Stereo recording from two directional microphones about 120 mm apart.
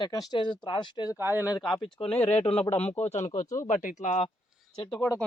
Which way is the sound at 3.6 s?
90° left.